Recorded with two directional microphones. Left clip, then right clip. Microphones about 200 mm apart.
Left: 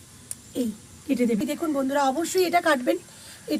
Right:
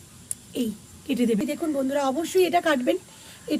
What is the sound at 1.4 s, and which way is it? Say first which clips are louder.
Speech: even; 5° right (ahead or behind).